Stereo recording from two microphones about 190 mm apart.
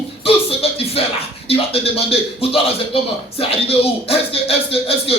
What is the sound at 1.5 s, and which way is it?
A man's voice, 30° left (ahead or behind).